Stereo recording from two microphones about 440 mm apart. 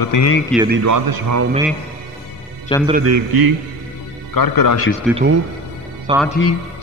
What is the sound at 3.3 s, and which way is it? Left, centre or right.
Speech, right.